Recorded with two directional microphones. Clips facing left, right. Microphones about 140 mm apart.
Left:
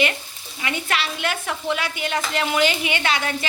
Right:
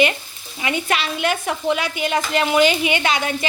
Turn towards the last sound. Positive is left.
turn(degrees=-20)  # may be behind; listen again after turning